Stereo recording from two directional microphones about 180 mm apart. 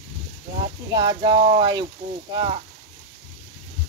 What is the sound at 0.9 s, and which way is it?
Speech, 25° right (ahead or behind).